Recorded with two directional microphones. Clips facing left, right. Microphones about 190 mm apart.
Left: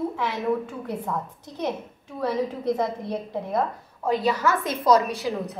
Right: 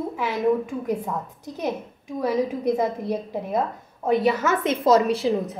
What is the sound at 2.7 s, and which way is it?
Speech, 10° right (ahead or behind).